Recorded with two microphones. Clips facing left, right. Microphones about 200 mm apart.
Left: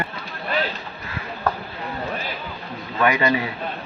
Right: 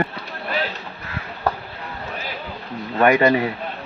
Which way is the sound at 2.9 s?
50° right (ahead or behind).